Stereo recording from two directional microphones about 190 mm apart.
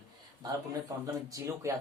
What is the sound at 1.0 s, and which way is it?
Speech, 15° right (ahead or behind).